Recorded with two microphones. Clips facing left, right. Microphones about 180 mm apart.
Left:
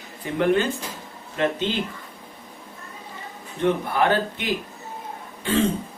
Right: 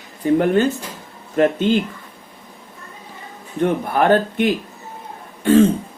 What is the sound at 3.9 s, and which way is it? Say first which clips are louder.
Speech: right 6 dB; 50° right (ahead or behind).